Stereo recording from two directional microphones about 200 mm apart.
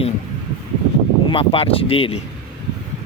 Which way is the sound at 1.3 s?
25° left (ahead or behind).